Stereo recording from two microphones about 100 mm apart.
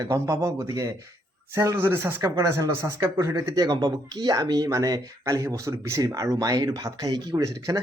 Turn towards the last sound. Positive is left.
turn(degrees=-35)  # may be behind; listen again after turning